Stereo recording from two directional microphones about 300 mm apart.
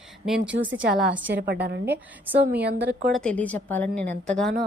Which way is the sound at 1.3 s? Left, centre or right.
Right.